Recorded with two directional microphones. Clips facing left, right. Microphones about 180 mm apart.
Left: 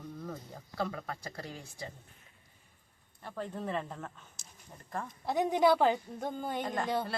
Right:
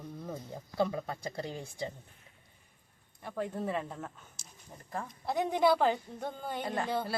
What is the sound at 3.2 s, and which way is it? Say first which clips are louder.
Speech: right 3 dB; 10° right (ahead or behind).